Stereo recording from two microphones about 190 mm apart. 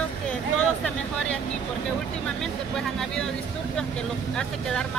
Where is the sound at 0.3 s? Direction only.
5° left (ahead or behind).